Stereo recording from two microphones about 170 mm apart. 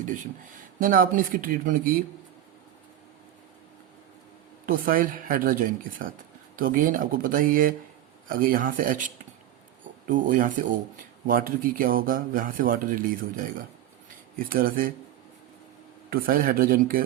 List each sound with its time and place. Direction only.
0.8 s speech: 55° right (ahead or behind)
4.6 s speech: 55° right (ahead or behind)
16.0 s speech: 60° right (ahead or behind)